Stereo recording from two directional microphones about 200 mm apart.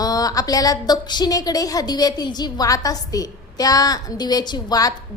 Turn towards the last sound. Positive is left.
turn(degrees=20)  # may be behind; listen again after turning